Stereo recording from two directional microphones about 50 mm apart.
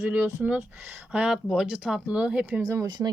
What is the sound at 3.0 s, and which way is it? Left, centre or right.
Speech, right.